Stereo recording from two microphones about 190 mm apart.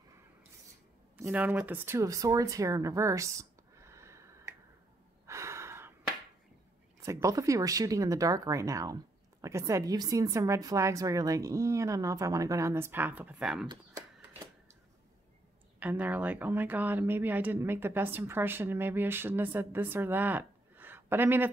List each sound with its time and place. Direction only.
1.1 s speech: 10° right (ahead or behind)
5.2 s gasp: 15° right (ahead or behind)
7.1 s speech: 15° right (ahead or behind)
15.8 s speech: 10° right (ahead or behind)